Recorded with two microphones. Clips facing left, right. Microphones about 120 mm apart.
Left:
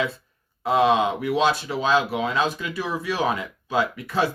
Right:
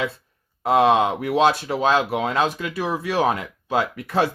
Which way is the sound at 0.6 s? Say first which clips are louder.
Right 2 dB; 60° right (ahead or behind).